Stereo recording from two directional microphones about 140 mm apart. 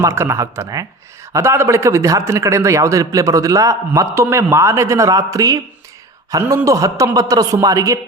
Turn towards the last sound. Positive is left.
turn(degrees=-25)  # may be behind; listen again after turning